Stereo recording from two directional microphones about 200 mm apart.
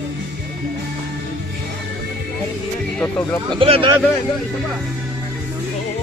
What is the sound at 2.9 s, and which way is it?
Speech, 5° left (ahead or behind).